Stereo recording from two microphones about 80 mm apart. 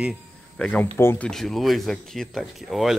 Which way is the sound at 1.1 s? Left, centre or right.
Centre.